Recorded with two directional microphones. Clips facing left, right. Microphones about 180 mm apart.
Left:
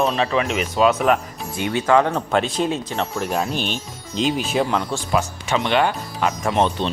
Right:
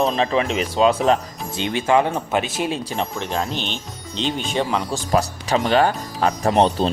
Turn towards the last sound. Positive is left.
turn(degrees=-35)  # may be behind; listen again after turning